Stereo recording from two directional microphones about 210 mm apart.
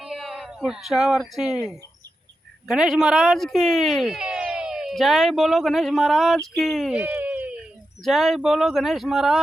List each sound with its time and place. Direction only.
0.0 s speech: centre (ahead or behind)
2.6 s speech: 5° right (ahead or behind)